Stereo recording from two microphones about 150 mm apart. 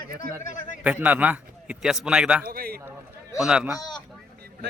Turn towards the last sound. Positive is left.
turn(degrees=30)  # may be behind; listen again after turning